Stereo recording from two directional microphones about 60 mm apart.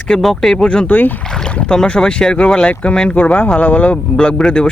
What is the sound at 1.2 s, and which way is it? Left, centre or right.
Boat, centre.